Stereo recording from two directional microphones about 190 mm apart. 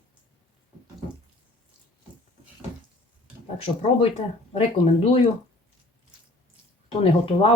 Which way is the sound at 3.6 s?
30° left (ahead or behind).